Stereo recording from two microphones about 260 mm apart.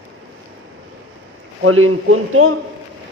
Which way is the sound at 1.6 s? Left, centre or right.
Right.